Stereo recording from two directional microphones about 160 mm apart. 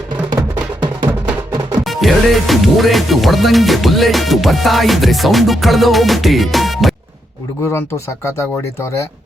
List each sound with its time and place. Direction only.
1.8 s speech: centre (ahead or behind)
7.7 s speech: 15° left (ahead or behind)